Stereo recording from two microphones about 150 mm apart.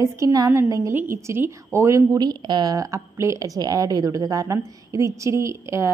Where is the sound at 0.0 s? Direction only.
20° right (ahead or behind).